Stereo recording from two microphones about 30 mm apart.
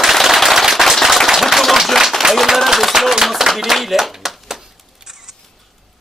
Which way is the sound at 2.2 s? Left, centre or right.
Centre.